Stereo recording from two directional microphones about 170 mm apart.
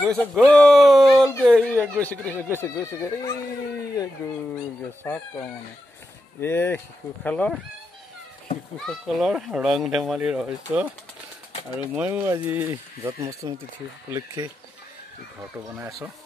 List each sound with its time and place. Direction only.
0.0 s speech: 5° left (ahead or behind)
1.4 s speech: 10° right (ahead or behind)
2.0 s speech: 10° left (ahead or behind)
5.0 s speech: 10° left (ahead or behind)
8.7 s speech: centre (ahead or behind)
11.9 s speech: 10° right (ahead or behind)
15.7 s speech: 15° right (ahead or behind)